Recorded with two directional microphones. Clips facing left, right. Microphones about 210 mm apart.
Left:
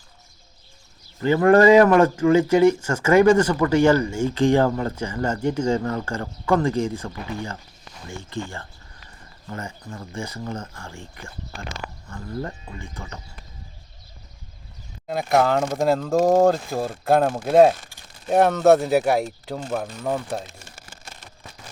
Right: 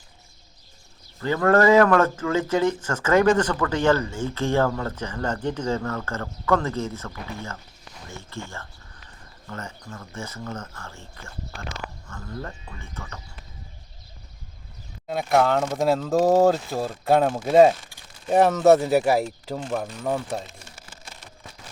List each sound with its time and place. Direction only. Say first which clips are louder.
1.2 s speech: left 4 dB; 15° left (ahead or behind)
15.0 s speech: left 1 dB; centre (ahead or behind)
20.7 s a sound: left 1 dB; 45° left (ahead or behind)